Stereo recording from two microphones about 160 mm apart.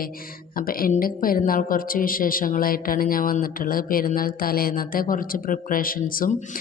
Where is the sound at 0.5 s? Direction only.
65° left (ahead or behind).